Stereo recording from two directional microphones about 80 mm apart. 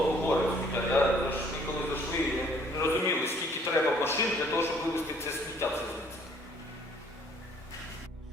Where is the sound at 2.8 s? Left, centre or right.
Left.